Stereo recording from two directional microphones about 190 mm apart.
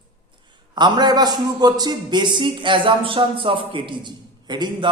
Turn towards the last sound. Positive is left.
turn(degrees=-20)  # may be behind; listen again after turning